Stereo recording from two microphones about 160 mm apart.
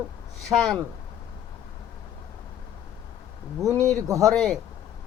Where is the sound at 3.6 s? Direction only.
20° right (ahead or behind).